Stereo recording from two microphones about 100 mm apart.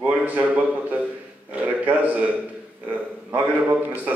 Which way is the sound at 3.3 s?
20° right (ahead or behind).